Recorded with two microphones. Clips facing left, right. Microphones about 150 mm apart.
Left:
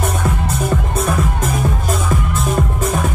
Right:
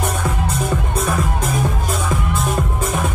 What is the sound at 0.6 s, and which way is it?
Music, centre (ahead or behind).